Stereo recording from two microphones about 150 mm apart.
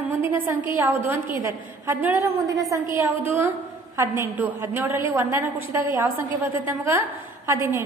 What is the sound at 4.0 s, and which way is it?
A woman's voice, 15° right (ahead or behind).